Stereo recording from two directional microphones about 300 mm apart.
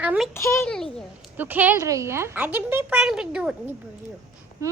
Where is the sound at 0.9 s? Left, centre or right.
Centre.